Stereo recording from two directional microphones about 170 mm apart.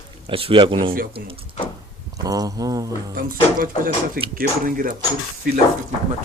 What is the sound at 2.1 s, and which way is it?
Speech, 20° right (ahead or behind).